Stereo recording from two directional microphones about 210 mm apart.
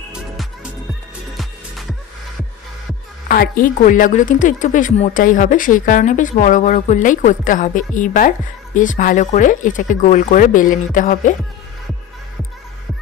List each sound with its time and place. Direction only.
1.3 s music: centre (ahead or behind)
3.3 s speech: 45° left (ahead or behind)